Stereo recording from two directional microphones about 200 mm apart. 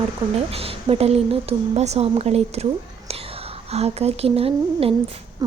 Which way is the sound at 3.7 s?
30° right (ahead or behind).